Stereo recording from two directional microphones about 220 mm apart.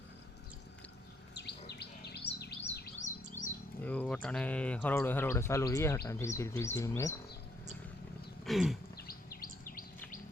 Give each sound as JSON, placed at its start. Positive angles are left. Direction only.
{"t": 1.8, "sound": "bird", "side_deg": 50}
{"t": 3.0, "sound": "chirp", "side_deg": 35}
{"t": 3.8, "sound": "speech", "side_deg": 5}
{"t": 8.4, "sound": "a sound", "side_deg": 0}
{"t": 9.0, "sound": "bird", "side_deg": 40}